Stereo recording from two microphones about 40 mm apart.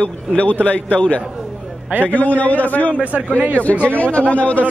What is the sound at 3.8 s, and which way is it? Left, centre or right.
Speech, left.